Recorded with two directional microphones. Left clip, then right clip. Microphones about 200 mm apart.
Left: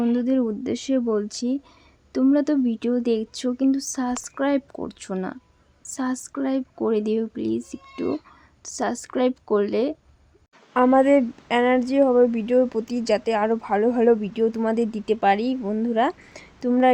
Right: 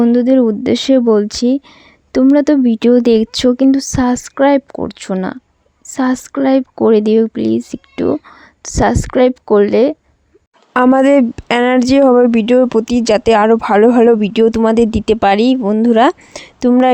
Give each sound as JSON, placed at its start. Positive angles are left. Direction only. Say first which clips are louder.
{"t": 0.0, "sound": "speech", "louder": "right 12 dB", "side_deg": -35}
{"t": 10.8, "sound": "speech", "louder": "right 7 dB", "side_deg": -45}